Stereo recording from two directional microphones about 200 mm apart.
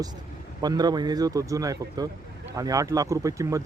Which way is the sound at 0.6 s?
20° right (ahead or behind).